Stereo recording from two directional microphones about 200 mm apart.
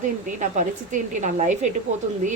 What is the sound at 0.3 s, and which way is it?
Speech, 40° right (ahead or behind).